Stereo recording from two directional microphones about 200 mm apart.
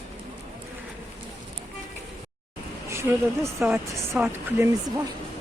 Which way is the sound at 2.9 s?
15° right (ahead or behind).